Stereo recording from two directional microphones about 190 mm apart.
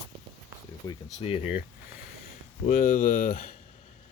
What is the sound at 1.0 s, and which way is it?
Speech, 35° left (ahead or behind).